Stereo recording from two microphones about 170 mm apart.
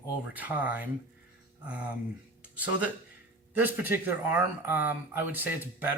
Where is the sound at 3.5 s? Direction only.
10° right (ahead or behind).